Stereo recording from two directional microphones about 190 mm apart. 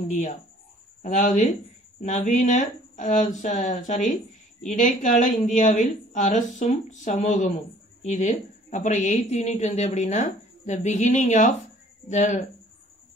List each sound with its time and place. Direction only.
1.0 s a woman's voice: 40° left (ahead or behind)